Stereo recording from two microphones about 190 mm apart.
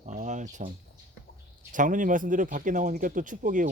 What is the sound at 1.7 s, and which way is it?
Speech, 45° right (ahead or behind).